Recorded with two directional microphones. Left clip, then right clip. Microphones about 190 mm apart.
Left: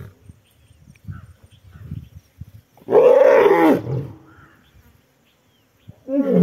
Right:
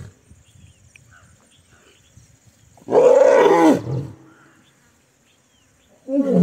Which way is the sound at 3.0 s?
25° left (ahead or behind).